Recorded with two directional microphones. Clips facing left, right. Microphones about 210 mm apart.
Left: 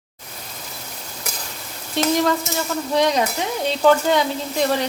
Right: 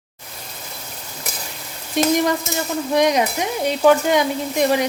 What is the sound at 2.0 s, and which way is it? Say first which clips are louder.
Sizzle: right 1 dB; 15° right (ahead or behind).